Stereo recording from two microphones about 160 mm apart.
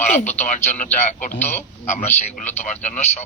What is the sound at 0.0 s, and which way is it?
Speech, 45° left (ahead or behind).